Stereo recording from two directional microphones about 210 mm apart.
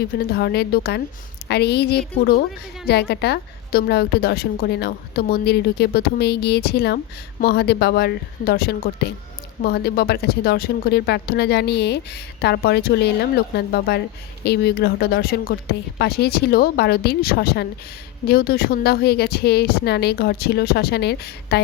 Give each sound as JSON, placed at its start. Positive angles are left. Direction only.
{"t": 0.0, "sound": "a woman's voice", "side_deg": 50}